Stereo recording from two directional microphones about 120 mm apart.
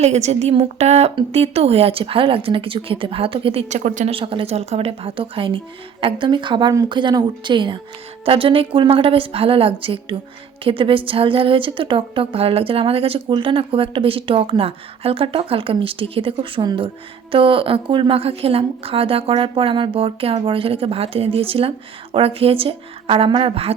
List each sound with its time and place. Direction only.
0.0 s a woman's voice: 65° right (ahead or behind); by 4.1 s 90° right
4.1 s a woman's voice: 45° right (ahead or behind)